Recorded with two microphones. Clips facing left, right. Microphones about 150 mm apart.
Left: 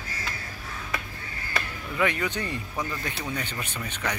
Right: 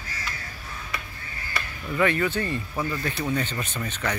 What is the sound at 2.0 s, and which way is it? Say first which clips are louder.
Speech: right 3 dB; 15° left (ahead or behind).